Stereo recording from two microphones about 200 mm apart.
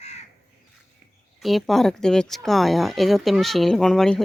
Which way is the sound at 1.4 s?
Centre (ahead or behind).